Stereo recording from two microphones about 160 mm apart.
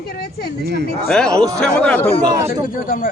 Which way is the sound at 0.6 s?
90° right.